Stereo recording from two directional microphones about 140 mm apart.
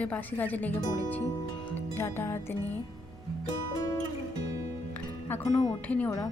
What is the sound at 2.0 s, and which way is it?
A woman's voice, 15° left (ahead or behind).